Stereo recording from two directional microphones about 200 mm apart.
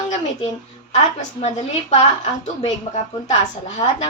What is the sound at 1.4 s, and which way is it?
A woman's voice, 30° left (ahead or behind).